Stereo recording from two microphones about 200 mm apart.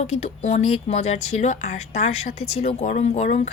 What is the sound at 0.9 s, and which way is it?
Speech, 35° left (ahead or behind).